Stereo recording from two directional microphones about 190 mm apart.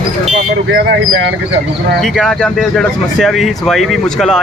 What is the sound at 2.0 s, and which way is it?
Speech, centre (ahead or behind).